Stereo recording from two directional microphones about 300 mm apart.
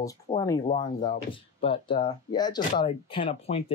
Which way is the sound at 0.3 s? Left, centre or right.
Centre.